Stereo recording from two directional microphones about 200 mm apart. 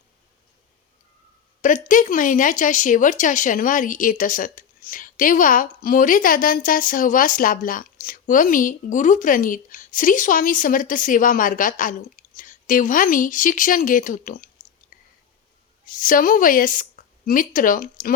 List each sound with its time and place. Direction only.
1.6 s speech: 40° left (ahead or behind)
15.9 s speech: 45° left (ahead or behind)